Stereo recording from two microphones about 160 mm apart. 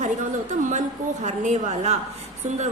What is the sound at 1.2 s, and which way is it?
Speech, 50° right (ahead or behind).